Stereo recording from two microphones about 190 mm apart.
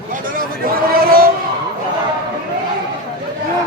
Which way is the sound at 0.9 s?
50° right (ahead or behind).